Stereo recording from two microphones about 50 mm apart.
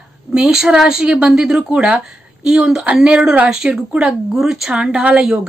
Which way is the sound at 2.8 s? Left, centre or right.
Right.